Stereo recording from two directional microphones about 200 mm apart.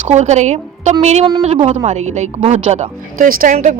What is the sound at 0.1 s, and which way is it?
A woman's voice, 35° right (ahead or behind).